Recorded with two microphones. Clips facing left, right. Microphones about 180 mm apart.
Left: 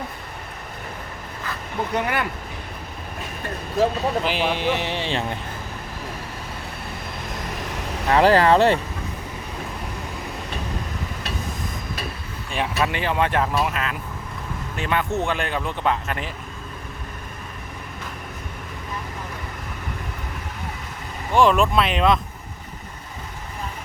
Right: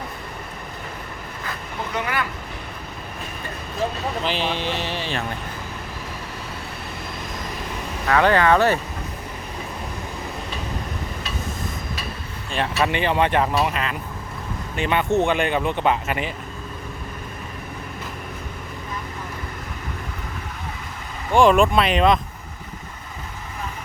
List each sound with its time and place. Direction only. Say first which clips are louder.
2.0 s speech: left 1 dB; 55° left (ahead or behind)
4.2 s speech: left 2 dB; 10° left (ahead or behind)
8.0 s speech: left 2 dB; 30° left (ahead or behind)
12.5 s speech: right 1 dB; 5° left (ahead or behind)
21.3 s speech: right 2 dB; centre (ahead or behind)